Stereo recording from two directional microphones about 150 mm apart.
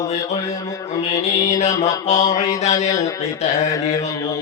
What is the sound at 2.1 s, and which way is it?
Mantra, 50° left (ahead or behind).